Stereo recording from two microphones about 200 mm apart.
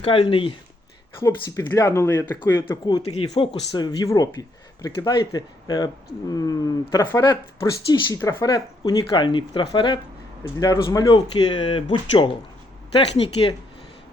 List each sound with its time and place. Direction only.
0.0 s speech: 30° left (ahead or behind)